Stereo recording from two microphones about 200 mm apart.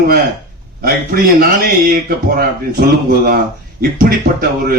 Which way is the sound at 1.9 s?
45° right (ahead or behind).